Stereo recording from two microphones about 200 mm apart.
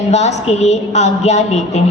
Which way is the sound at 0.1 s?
35° left (ahead or behind).